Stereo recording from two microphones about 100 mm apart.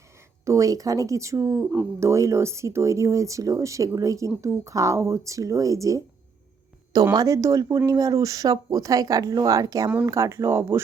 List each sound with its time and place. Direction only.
0.4 s speech: 35° right (ahead or behind)